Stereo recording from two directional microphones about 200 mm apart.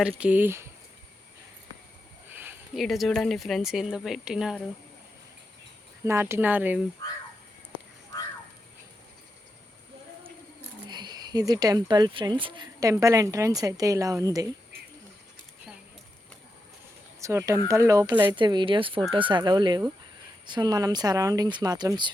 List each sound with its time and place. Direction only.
0.0 s speech: 5° right (ahead or behind)
2.3 s a sound: 10° right (ahead or behind)
2.8 s a woman's voice: centre (ahead or behind)
6.1 s speech: 10° right (ahead or behind)
10.8 s speech: 20° right (ahead or behind)
17.2 s speech: 15° right (ahead or behind)